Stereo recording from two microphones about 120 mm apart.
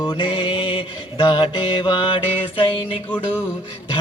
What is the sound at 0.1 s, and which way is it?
Mantra, 45° left (ahead or behind).